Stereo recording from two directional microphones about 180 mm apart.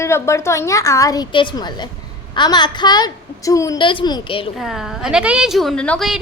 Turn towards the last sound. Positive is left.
turn(degrees=0)  # may be behind; listen again after turning